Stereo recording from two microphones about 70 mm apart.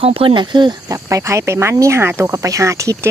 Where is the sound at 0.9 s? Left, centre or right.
Right.